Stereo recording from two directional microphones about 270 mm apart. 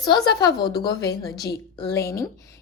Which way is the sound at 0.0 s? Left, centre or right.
Centre.